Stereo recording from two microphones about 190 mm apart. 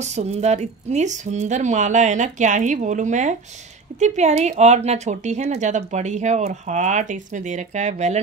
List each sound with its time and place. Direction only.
0.0 s speech: 35° right (ahead or behind)